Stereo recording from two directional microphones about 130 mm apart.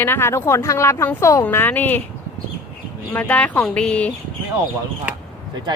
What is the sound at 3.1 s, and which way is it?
Speech, 10° left (ahead or behind).